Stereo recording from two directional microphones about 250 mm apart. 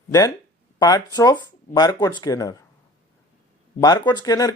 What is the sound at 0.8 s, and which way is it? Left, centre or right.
Speech, centre.